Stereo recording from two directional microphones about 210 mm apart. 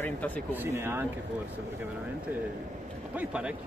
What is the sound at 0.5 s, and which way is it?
Speech, 10° right (ahead or behind).